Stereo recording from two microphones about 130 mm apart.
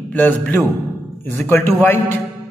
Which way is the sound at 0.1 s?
15° left (ahead or behind).